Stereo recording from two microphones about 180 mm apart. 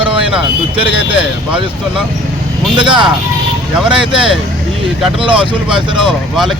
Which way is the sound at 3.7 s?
Centre (ahead or behind).